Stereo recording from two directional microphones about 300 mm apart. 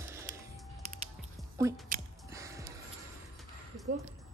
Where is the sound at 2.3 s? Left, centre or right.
Centre.